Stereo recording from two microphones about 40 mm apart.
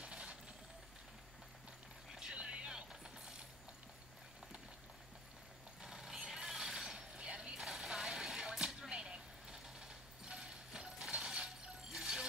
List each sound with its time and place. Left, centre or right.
0.0 s vehicle: right
2.1 s music: centre
5.8 s vehicle: centre
7.2 s a sound: right
11.9 s music: centre